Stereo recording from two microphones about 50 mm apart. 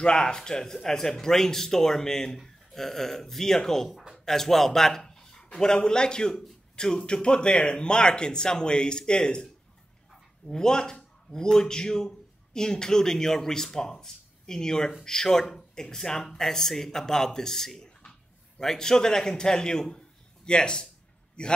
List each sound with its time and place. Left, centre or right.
0.0 s a man's voice: centre
4.2 s a sound: centre
5.6 s a man's voice: centre